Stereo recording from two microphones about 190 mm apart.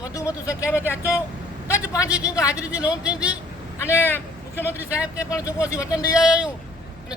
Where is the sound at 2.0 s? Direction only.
5° right (ahead or behind).